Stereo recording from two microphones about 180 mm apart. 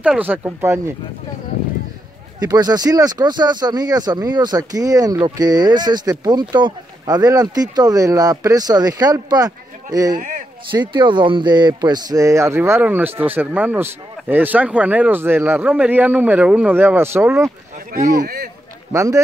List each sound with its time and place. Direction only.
0.0 s speech: 10° right (ahead or behind)
2.4 s speech: 20° right (ahead or behind)
10.1 s a sound: 45° right (ahead or behind)
10.7 s speech: 25° right (ahead or behind)
18.2 s speech: 60° right (ahead or behind)
18.9 s speech: 15° right (ahead or behind)